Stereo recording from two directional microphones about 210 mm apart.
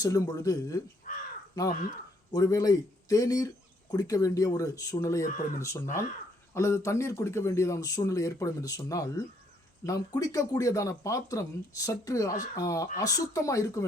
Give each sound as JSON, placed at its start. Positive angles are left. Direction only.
{"t": 0.0, "sound": "a man's voice", "side_deg": 15}
{"t": 1.1, "sound": "crow", "side_deg": 35}
{"t": 1.6, "sound": "a man's voice", "side_deg": 15}